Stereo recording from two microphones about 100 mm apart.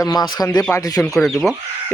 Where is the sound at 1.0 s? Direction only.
Centre (ahead or behind).